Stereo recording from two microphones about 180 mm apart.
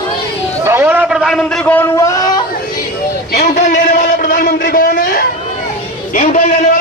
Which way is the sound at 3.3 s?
50° left (ahead or behind).